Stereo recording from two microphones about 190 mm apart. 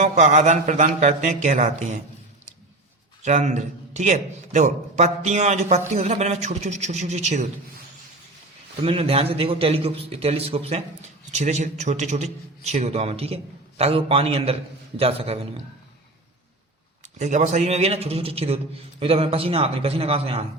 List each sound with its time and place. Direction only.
0.0 s a man's voice: 35° right (ahead or behind)
3.2 s a man's voice: 40° right (ahead or behind)
8.8 s a man's voice: 30° right (ahead or behind)
17.2 s a man's voice: 40° right (ahead or behind)